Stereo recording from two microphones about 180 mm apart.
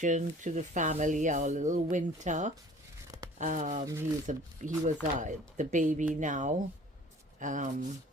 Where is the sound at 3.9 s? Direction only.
20° right (ahead or behind).